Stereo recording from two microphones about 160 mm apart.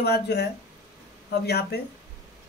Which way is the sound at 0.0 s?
90° left.